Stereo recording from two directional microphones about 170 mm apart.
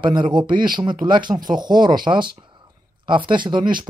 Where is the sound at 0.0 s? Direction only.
25° right (ahead or behind).